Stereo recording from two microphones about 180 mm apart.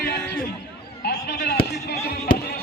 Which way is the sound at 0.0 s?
65° left (ahead or behind).